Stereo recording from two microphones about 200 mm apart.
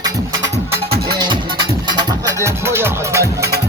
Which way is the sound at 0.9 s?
20° right (ahead or behind).